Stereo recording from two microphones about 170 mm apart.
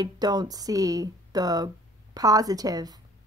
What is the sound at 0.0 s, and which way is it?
A woman's voice, 25° right (ahead or behind).